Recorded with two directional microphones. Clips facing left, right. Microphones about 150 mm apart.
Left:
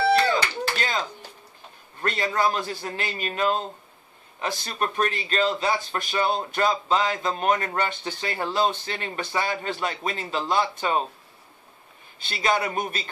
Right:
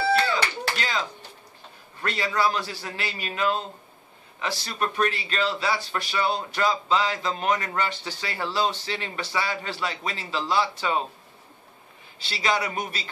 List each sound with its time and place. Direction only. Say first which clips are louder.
0.3 s a sound: left 2 dB; 40° left (ahead or behind)
2.0 s speech: left 1 dB; 45° left (ahead or behind)
7.7 s speech: left 1 dB; 35° left (ahead or behind)
8.2 s speech: left 2 dB; 45° left (ahead or behind)
12.3 s speech: left 2 dB; 50° left (ahead or behind)